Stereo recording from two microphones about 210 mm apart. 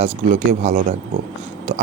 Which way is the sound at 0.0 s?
35° right (ahead or behind).